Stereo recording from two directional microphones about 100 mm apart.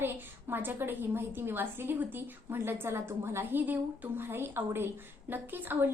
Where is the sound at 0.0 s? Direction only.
20° right (ahead or behind).